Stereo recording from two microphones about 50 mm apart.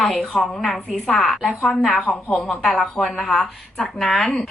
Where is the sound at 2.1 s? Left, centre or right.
Left.